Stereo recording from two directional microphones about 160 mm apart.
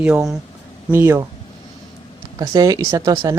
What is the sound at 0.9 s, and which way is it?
Speech, 15° right (ahead or behind).